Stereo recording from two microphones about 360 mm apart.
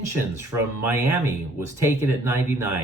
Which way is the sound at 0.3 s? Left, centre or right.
Centre.